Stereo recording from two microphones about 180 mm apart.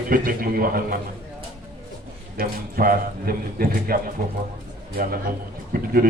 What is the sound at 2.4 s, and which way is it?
A man's voice, 55° right (ahead or behind).